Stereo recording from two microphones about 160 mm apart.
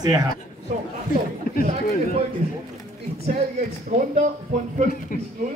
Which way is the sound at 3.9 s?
50° right (ahead or behind).